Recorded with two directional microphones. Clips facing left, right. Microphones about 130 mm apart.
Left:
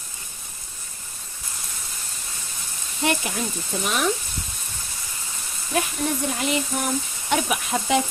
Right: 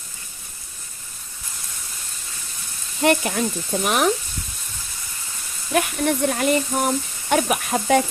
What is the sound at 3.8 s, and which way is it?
Speech, 55° right (ahead or behind).